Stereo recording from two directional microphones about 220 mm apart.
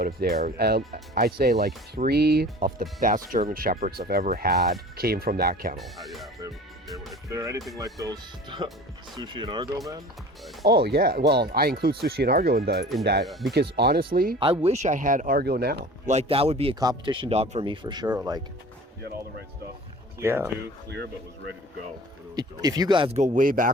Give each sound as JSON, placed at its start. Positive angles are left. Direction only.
{"t": 0.0, "sound": "speech", "side_deg": -45}
{"t": 5.7, "sound": "speech", "side_deg": 0}
{"t": 7.3, "sound": "speech", "side_deg": -15}
{"t": 10.6, "sound": "speech", "side_deg": -45}
{"t": 13.2, "sound": "speech", "side_deg": 0}
{"t": 13.5, "sound": "speech", "side_deg": -45}
{"t": 14.3, "sound": "speech", "side_deg": -25}
{"t": 20.1, "sound": "speech", "side_deg": -10}
{"t": 22.4, "sound": "speech", "side_deg": -15}